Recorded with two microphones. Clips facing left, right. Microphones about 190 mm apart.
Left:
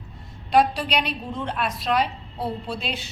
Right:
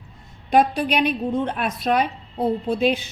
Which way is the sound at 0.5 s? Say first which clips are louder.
Right 2 dB; 50° right (ahead or behind).